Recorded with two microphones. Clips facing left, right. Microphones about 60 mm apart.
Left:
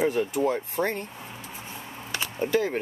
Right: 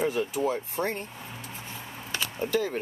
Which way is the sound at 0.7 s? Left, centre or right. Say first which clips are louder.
Left 3 dB; left.